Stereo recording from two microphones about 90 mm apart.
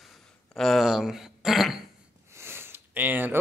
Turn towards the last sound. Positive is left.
turn(degrees=-20)  # may be behind; listen again after turning